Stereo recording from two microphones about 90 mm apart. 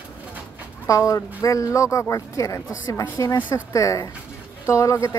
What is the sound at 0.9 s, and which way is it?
Speech, 35° left (ahead or behind).